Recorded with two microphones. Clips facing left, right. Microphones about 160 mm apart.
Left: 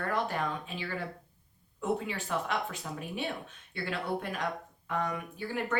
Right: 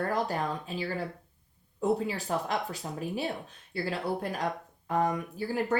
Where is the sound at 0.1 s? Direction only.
35° right (ahead or behind).